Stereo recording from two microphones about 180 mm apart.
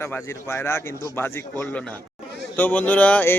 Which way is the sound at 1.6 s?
5° left (ahead or behind).